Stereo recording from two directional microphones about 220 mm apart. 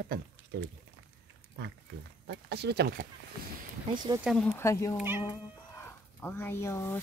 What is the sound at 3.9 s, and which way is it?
Speech, 20° right (ahead or behind).